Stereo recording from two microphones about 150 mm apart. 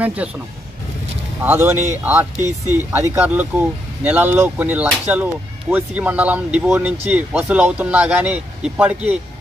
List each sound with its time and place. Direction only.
0.0 s speech: 10° right (ahead or behind)
1.4 s speech: 15° right (ahead or behind)